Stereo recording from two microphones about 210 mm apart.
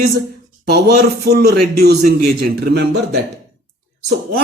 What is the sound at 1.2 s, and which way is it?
Speech, 50° right (ahead or behind).